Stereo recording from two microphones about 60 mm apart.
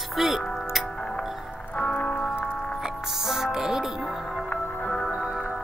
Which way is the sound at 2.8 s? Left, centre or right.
Centre.